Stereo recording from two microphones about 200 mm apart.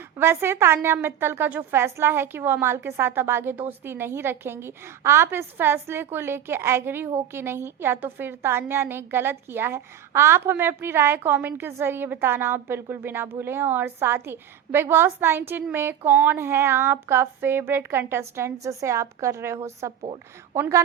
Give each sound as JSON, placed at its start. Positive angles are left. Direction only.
{"t": 0.2, "sound": "a woman's voice", "side_deg": -10}
{"t": 20.0, "sound": "a woman's voice", "side_deg": -30}
{"t": 20.6, "sound": "a woman's voice", "side_deg": -15}